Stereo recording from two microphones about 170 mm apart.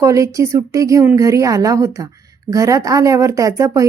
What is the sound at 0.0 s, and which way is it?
A woman's voice, 20° right (ahead or behind).